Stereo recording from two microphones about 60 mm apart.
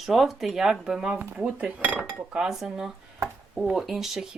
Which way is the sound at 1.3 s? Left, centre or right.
Right.